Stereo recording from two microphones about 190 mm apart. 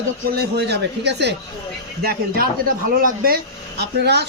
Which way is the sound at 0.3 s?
60° right (ahead or behind).